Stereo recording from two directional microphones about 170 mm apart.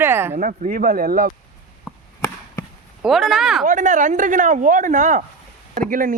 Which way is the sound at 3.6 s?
45° right (ahead or behind).